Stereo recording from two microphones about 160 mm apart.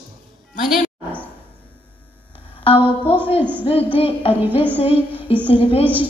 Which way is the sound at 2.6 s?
35° left (ahead or behind).